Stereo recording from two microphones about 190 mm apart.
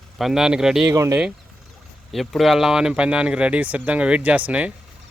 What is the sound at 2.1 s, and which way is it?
Speech, centre (ahead or behind).